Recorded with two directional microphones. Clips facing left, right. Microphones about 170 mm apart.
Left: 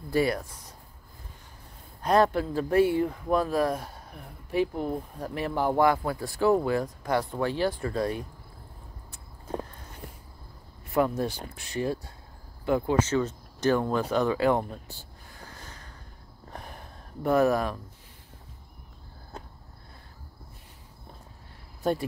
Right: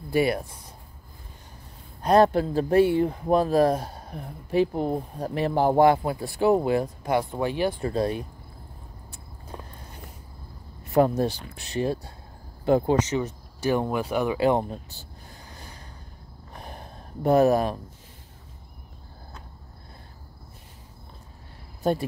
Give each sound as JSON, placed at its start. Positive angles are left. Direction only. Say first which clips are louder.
{"t": 0.1, "sound": "speech", "louder": "right 2 dB", "side_deg": -25}
{"t": 2.0, "sound": "speech", "louder": "right 4 dB", "side_deg": -30}
{"t": 10.9, "sound": "speech", "louder": "right 5 dB", "side_deg": -35}
{"t": 12.9, "sound": "speech", "louder": "right 1 dB", "side_deg": -15}
{"t": 15.3, "sound": "a sound", "louder": "left 1 dB", "side_deg": -15}
{"t": 16.6, "sound": "a sound", "louder": "right 4 dB", "side_deg": -25}